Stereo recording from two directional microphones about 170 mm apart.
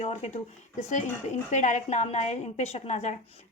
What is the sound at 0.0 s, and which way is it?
A woman's voice, 40° left (ahead or behind).